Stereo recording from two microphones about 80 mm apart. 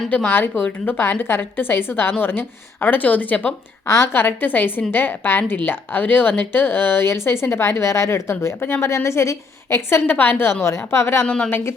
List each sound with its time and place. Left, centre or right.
0.1 s a woman's voice: left
3.8 s a woman's voice: left